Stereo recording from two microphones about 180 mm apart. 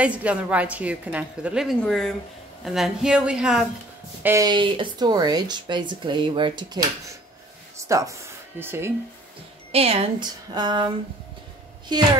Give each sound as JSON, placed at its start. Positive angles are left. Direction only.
{"t": 0.0, "sound": "a woman's voice", "side_deg": -5}
{"t": 4.2, "sound": "speech", "side_deg": -15}
{"t": 9.7, "sound": "a woman's voice", "side_deg": -35}
{"t": 11.9, "sound": "speech", "side_deg": -25}